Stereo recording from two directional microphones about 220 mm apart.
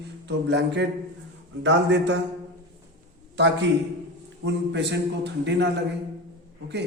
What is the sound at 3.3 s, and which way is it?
A man's voice, 55° right (ahead or behind).